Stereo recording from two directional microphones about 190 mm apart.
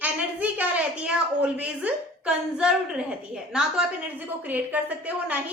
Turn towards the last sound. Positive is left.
turn(degrees=-10)  # may be behind; listen again after turning